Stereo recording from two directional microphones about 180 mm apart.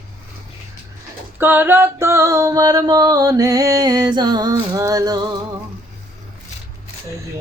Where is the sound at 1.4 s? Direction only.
10° right (ahead or behind).